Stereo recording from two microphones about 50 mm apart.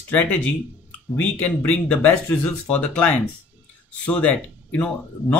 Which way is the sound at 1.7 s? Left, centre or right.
Left.